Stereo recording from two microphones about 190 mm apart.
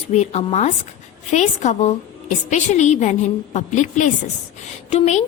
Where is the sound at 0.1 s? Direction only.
35° left (ahead or behind).